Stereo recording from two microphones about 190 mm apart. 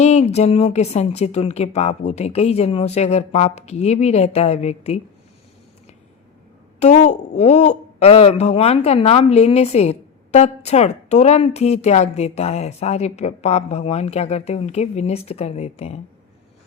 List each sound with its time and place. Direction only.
0.0 s a woman's voice: 35° left (ahead or behind)
6.7 s a woman's voice: 35° left (ahead or behind)